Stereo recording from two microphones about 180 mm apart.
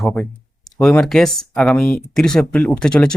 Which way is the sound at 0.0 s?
5° left (ahead or behind).